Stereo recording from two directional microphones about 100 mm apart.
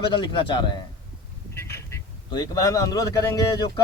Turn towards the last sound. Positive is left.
turn(degrees=40)  # may be behind; listen again after turning